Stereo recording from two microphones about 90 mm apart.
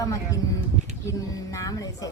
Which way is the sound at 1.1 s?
40° left (ahead or behind).